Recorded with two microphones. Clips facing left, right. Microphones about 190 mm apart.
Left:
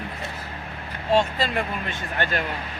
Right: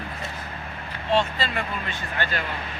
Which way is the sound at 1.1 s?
45° left (ahead or behind).